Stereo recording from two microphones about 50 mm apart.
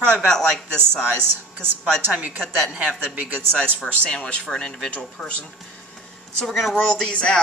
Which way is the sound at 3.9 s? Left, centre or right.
Centre.